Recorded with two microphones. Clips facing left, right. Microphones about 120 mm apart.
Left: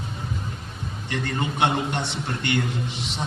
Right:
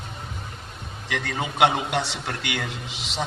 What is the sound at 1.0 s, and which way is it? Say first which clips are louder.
A man's voice: left 1 dB; 90° right.